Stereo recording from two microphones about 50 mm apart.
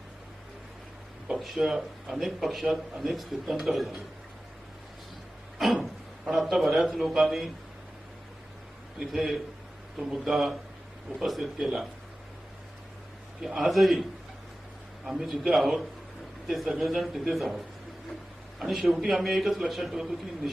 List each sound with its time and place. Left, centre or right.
1.3 s a man's voice: centre
5.8 s a man's voice: centre
9.0 s a man's voice: centre
13.6 s a man's voice: centre
15.0 s a man's voice: centre
18.6 s a man's voice: centre